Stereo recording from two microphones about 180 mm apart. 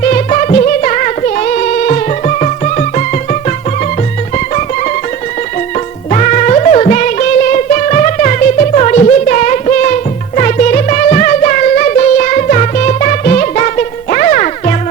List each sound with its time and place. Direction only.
0.0 s music: 40° left (ahead or behind)
6.1 s music: 40° left (ahead or behind)